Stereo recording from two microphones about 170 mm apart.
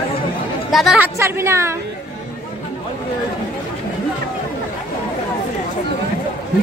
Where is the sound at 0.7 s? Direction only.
Centre (ahead or behind).